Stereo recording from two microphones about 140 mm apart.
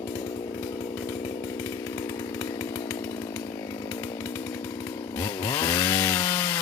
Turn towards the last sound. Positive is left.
turn(degrees=20)  # may be behind; listen again after turning